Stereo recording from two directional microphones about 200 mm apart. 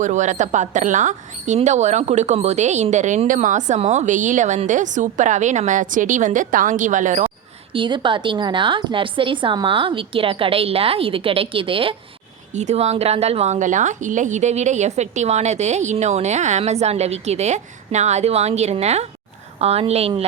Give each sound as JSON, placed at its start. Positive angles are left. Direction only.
{"t": 0.0, "sound": "a woman's voice", "side_deg": -35}
{"t": 7.7, "sound": "a woman's voice", "side_deg": -25}